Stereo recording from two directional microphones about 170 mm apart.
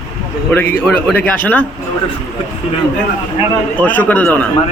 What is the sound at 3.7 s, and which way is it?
Speech, 10° left (ahead or behind).